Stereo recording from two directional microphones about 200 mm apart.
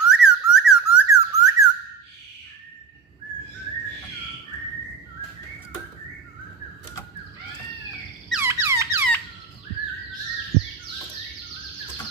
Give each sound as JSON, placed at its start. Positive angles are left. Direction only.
{"t": 0.0, "sound": "a sound", "side_deg": -5}
{"t": 1.1, "sound": "squawk", "side_deg": -15}
{"t": 8.3, "sound": "squeak", "side_deg": -10}